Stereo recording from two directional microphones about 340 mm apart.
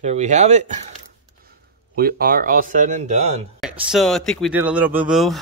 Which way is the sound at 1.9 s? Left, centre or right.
Right.